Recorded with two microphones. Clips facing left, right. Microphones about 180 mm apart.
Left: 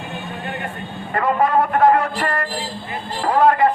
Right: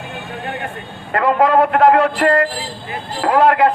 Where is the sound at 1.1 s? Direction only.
75° right (ahead or behind).